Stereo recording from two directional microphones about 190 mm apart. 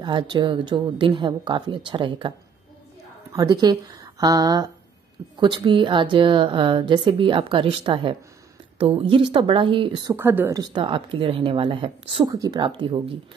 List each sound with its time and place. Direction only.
0.0 s a woman's voice: 25° right (ahead or behind)
3.3 s a woman's voice: 20° right (ahead or behind)
10.1 s a woman's voice: 10° right (ahead or behind); by 13.2 s 25° right (ahead or behind)